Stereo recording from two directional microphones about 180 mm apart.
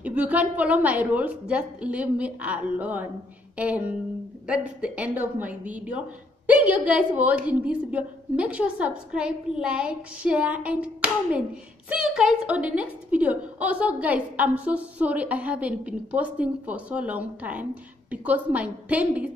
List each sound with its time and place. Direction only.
0.0 s a woman's voice: 10° right (ahead or behind)